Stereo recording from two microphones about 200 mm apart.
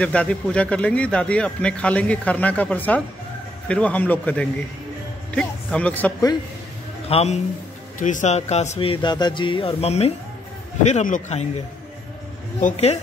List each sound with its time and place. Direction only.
0.0 s a man's voice: 5° left (ahead or behind)
7.1 s a man's voice: 30° left (ahead or behind)
12.5 s speech: 35° left (ahead or behind)